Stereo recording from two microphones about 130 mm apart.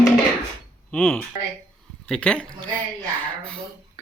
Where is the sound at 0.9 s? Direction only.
5° left (ahead or behind).